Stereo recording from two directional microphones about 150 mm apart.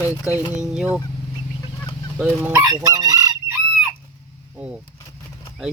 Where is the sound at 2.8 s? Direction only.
25° right (ahead or behind).